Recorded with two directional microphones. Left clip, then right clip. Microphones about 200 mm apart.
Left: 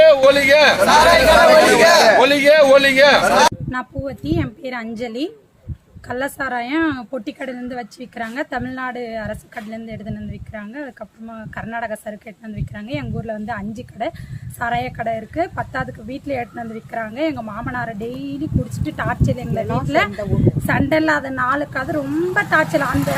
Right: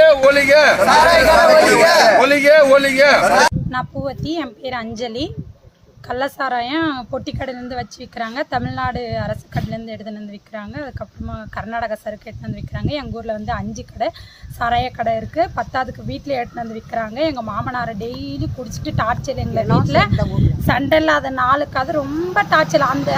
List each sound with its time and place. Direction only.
0.0 s a man's voice: centre (ahead or behind)
1.8 s a sound: 10° left (ahead or behind)
2.1 s a woman's voice: 5° left (ahead or behind)